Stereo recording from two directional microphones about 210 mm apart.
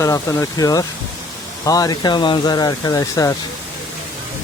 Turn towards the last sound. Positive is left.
turn(degrees=15)  # may be behind; listen again after turning